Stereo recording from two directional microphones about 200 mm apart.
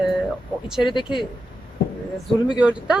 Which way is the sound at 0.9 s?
25° left (ahead or behind).